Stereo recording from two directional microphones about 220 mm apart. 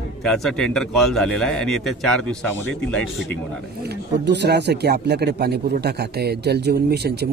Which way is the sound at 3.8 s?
50° right (ahead or behind).